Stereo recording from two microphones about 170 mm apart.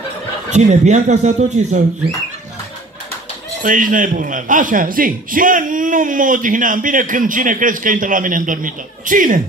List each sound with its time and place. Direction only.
0.5 s a man's voice: 45° right (ahead or behind)
3.6 s a man's voice: 50° right (ahead or behind)